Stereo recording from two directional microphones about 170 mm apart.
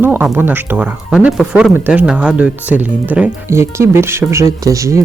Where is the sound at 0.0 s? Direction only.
10° right (ahead or behind).